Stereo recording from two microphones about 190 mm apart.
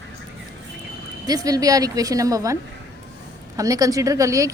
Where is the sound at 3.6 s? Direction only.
20° right (ahead or behind).